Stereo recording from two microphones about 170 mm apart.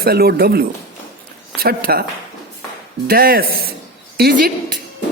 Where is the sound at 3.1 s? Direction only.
60° right (ahead or behind).